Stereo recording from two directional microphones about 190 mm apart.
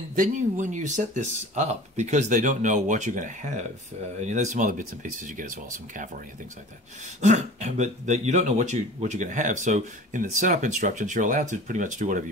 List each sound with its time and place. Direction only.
0.1 s speech: 45° right (ahead or behind)
7.2 s speech: 40° right (ahead or behind)